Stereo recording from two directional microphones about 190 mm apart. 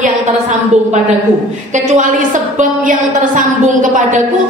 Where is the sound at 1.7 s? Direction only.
40° right (ahead or behind).